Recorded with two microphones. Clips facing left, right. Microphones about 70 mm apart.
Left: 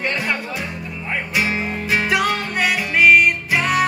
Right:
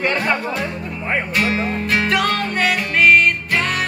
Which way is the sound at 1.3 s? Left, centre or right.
Centre.